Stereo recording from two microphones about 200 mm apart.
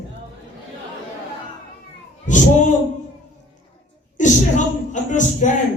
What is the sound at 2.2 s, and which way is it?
Speech, 40° left (ahead or behind).